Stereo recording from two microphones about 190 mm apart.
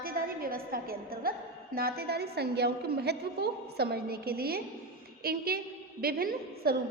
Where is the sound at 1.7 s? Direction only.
55° right (ahead or behind).